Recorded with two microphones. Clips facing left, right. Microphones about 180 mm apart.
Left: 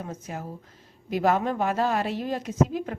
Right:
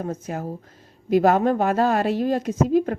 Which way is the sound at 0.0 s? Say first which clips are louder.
Right 7 dB; 50° right (ahead or behind).